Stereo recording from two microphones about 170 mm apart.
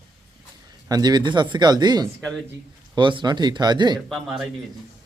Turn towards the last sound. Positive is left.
turn(degrees=0)  # may be behind; listen again after turning